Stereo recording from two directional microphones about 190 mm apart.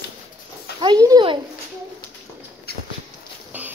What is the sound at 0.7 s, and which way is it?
Speech, 20° right (ahead or behind).